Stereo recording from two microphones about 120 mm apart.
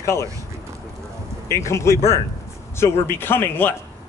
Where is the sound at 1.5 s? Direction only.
25° left (ahead or behind).